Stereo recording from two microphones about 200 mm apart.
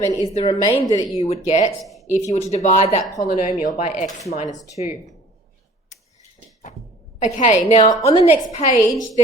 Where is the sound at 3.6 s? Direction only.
35° left (ahead or behind).